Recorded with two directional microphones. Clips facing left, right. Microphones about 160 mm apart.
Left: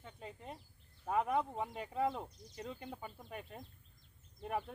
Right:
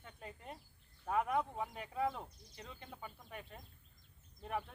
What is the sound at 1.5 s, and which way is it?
Speech, 25° left (ahead or behind).